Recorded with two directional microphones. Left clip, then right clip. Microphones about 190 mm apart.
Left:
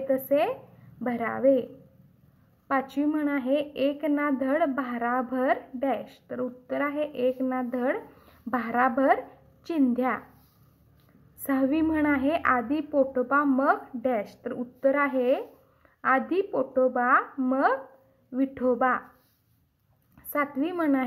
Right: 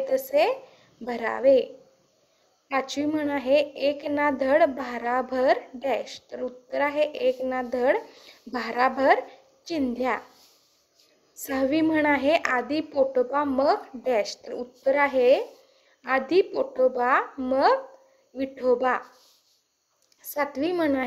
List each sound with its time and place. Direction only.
0.1 s a woman's voice: 35° right (ahead or behind)
2.7 s a woman's voice: 35° right (ahead or behind)
11.5 s a woman's voice: 35° right (ahead or behind)
20.3 s a woman's voice: 35° right (ahead or behind)